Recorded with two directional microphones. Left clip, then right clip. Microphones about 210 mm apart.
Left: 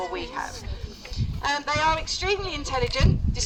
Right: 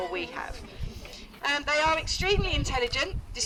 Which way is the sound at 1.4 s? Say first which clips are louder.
Left 2 dB; 10° right (ahead or behind).